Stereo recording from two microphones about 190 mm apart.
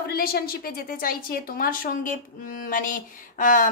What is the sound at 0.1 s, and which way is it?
Speech, 50° left (ahead or behind).